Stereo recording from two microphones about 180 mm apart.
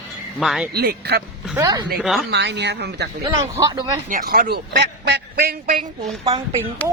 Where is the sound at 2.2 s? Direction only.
75° right (ahead or behind).